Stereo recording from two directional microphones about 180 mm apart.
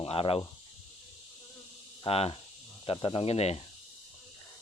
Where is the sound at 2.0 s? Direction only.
30° left (ahead or behind).